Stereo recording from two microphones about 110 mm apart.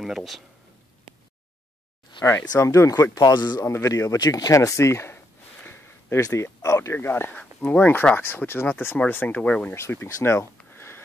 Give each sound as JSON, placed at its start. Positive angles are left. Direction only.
{"t": 0.0, "sound": "speech", "side_deg": 0}
{"t": 2.4, "sound": "speech", "side_deg": 30}
{"t": 3.2, "sound": "speech", "side_deg": 40}
{"t": 3.6, "sound": "speech", "side_deg": 25}
{"t": 9.8, "sound": "speech", "side_deg": 25}